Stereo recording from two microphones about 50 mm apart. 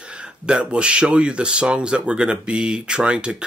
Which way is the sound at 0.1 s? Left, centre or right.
Right.